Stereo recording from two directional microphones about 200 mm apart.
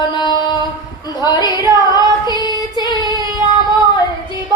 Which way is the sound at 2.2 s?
20° left (ahead or behind).